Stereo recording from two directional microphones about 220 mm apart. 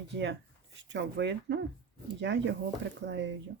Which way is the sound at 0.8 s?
55° right (ahead or behind).